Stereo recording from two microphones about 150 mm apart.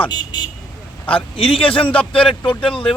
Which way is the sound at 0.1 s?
30° left (ahead or behind).